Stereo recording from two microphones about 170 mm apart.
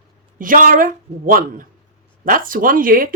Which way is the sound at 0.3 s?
55° right (ahead or behind).